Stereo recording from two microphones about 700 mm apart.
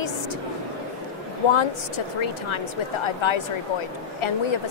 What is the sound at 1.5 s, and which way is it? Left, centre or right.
Speech, left.